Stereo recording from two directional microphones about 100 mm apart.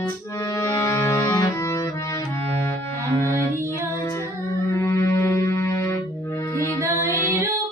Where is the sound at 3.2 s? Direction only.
25° left (ahead or behind).